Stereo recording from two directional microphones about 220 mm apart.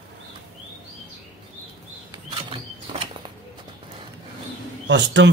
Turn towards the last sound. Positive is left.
turn(degrees=-55)  # may be behind; listen again after turning